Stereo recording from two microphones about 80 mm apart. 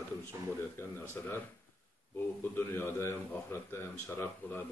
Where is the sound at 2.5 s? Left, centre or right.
Left.